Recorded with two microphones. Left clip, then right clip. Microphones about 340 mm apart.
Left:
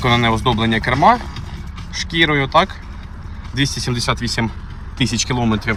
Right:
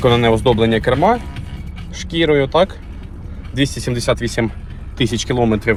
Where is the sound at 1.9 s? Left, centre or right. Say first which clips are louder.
Right 1 dB; centre.